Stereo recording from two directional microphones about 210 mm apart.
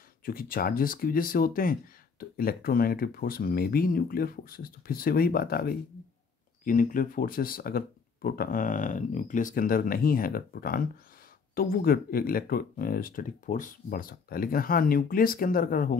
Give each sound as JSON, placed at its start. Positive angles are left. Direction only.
{"t": 0.2, "sound": "speech", "side_deg": 45}